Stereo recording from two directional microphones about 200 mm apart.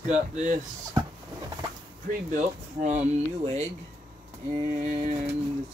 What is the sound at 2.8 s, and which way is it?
Speech, 35° right (ahead or behind).